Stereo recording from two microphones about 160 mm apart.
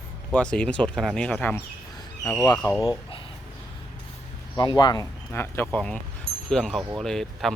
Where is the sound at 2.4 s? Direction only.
20° left (ahead or behind).